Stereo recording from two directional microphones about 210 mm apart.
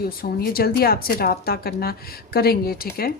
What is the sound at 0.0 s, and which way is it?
Speech, 45° left (ahead or behind).